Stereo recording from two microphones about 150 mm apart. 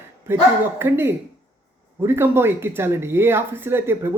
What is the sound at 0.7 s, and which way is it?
Speech, 15° right (ahead or behind).